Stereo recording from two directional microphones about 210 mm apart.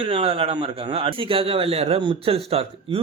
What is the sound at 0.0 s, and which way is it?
A man's voice, 25° right (ahead or behind).